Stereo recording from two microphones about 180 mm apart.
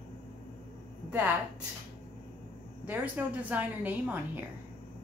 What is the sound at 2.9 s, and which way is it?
A woman's voice, 10° right (ahead or behind).